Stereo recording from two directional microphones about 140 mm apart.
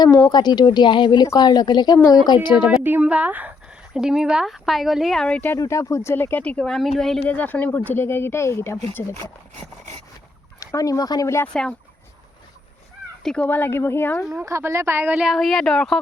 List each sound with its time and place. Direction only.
0.0 s a woman's voice: 25° left (ahead or behind)
2.6 s speech: 10° right (ahead or behind); by 5.5 s 10° left (ahead or behind)
5.5 s speech: 20° left (ahead or behind)
10.6 s speech: 25° left (ahead or behind)
13.2 s speech: 5° left (ahead or behind)
14.4 s speech: 20° right (ahead or behind); by 16.0 s 5° left (ahead or behind)